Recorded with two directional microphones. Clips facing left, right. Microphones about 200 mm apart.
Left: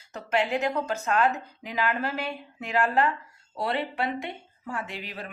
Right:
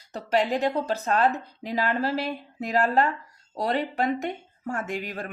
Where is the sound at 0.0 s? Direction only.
35° right (ahead or behind).